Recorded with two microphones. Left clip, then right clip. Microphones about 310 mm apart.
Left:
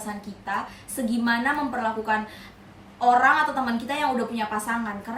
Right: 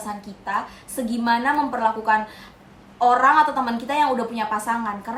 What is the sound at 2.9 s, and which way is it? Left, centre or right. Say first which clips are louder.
A woman's voice: right 3 dB; centre.